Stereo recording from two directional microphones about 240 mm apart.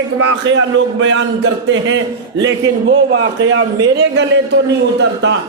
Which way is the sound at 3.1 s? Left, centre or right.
Right.